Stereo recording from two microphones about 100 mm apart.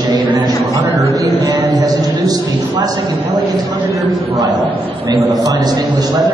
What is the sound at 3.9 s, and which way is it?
A man's voice, 30° right (ahead or behind).